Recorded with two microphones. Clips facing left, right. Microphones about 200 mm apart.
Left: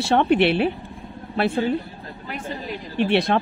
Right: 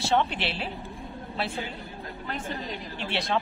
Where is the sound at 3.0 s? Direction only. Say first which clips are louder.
Left 12 dB; 60° left (ahead or behind).